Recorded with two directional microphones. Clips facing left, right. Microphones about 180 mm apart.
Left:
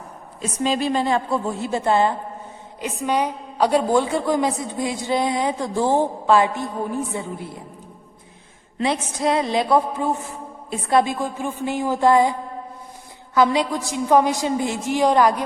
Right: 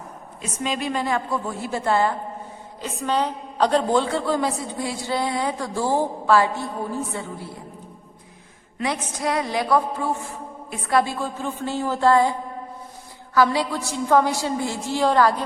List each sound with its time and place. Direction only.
0.6 s a woman's voice: 30° left (ahead or behind)
8.8 s a woman's voice: 25° left (ahead or behind)